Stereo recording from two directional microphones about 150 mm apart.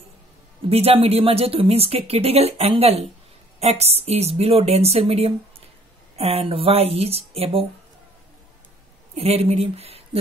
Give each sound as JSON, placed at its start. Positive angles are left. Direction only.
{"t": 0.7, "sound": "a woman's voice", "side_deg": -40}
{"t": 9.1, "sound": "a woman's voice", "side_deg": -45}